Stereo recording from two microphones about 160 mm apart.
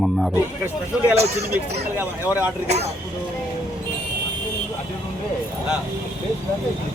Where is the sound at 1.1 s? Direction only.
40° right (ahead or behind).